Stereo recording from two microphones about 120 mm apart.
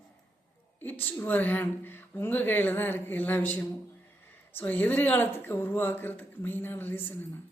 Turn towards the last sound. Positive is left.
turn(degrees=15)  # may be behind; listen again after turning